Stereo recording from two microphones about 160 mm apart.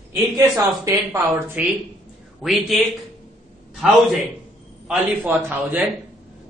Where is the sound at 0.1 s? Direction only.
15° right (ahead or behind).